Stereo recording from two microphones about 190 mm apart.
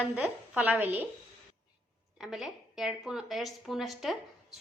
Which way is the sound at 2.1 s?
Centre (ahead or behind).